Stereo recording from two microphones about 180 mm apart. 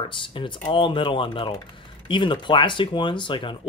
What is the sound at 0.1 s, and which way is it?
Speech, 30° left (ahead or behind).